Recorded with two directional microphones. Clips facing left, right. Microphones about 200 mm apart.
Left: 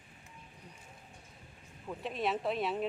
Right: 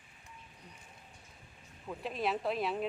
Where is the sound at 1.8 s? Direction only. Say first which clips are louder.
Even; centre (ahead or behind).